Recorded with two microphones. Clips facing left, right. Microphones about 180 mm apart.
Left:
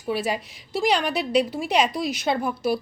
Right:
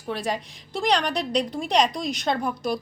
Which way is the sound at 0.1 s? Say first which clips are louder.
Left 2 dB; 5° left (ahead or behind).